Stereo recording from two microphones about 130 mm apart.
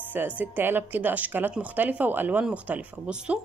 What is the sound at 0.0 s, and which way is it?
Speech, 15° right (ahead or behind).